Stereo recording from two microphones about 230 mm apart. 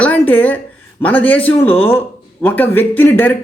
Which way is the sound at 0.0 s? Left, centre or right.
Centre.